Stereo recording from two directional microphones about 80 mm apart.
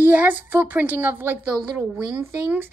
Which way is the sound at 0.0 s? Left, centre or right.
Right.